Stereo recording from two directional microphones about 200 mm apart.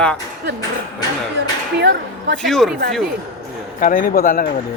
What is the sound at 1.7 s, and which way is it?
Speech, 60° right (ahead or behind).